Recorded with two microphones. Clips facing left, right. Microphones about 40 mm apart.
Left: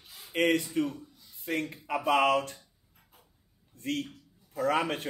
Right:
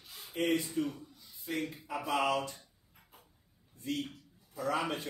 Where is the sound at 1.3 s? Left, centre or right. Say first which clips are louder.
Left 5 dB; left.